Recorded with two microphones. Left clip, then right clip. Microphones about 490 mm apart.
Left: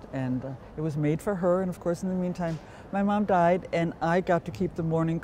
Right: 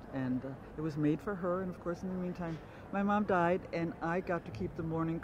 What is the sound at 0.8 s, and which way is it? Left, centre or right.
Speech, left.